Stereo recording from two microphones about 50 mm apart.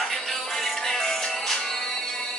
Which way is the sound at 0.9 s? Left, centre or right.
Centre.